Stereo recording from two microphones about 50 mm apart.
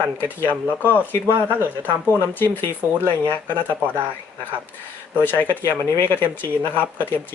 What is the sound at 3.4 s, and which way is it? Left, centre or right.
Speech, right.